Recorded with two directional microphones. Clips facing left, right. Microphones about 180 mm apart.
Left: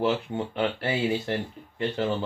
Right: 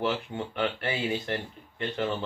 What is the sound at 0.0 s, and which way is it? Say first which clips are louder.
Speech: left 4 dB; 25° left (ahead or behind).